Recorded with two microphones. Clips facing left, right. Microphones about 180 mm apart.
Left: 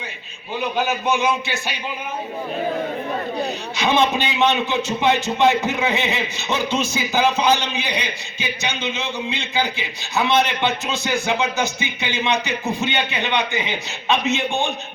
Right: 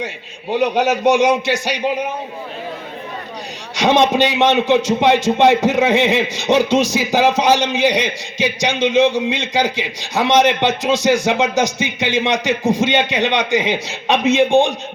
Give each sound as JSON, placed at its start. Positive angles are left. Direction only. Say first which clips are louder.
{"t": 0.5, "sound": "a man's voice", "louder": "right 7 dB", "side_deg": -80}
{"t": 3.8, "sound": "a man's voice", "louder": "right 6 dB", "side_deg": -85}
{"t": 12.7, "sound": "a man's voice", "louder": "right 7 dB", "side_deg": -90}